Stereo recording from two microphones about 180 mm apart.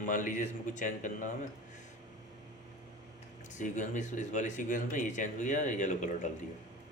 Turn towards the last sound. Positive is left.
turn(degrees=45)  # may be behind; listen again after turning